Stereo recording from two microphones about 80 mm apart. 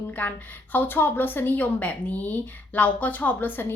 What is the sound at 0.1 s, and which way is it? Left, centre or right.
Speech, left.